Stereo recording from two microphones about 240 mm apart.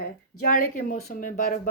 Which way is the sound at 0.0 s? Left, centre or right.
Left.